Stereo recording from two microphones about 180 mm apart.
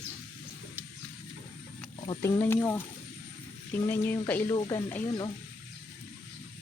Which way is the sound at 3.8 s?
10° left (ahead or behind).